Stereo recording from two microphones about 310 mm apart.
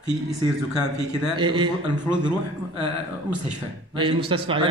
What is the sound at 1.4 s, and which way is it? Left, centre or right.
Speech, centre.